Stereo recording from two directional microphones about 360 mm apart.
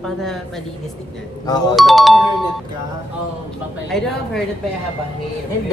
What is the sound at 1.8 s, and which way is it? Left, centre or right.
Speech, centre.